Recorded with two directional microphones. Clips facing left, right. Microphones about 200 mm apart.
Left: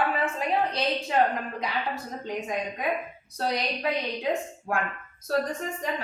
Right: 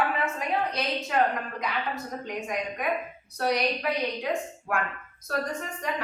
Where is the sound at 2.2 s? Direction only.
25° left (ahead or behind).